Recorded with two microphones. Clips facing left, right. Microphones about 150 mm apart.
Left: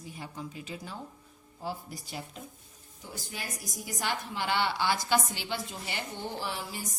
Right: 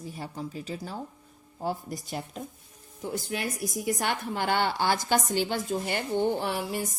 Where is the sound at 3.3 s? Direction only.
65° right (ahead or behind).